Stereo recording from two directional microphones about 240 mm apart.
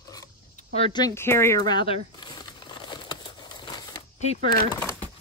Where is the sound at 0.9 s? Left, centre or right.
Centre.